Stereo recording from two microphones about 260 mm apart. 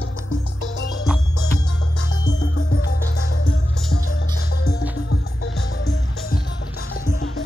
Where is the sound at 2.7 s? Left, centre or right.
Left.